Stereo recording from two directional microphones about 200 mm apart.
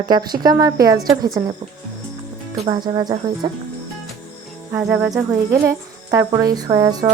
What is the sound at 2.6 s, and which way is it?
Speech, 25° right (ahead or behind).